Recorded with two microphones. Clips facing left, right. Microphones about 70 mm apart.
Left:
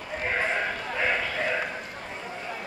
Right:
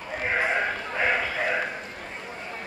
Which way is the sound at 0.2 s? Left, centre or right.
Centre.